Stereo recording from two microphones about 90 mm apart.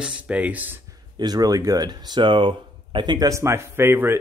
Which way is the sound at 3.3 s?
30° right (ahead or behind).